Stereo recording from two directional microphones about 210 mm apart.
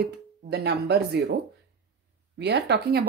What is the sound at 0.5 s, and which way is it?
Speech, 50° right (ahead or behind).